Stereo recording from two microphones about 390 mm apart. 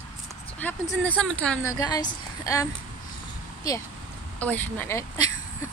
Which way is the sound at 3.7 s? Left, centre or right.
Centre.